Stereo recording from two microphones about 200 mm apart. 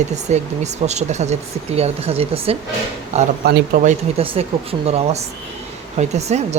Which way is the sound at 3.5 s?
55° right (ahead or behind).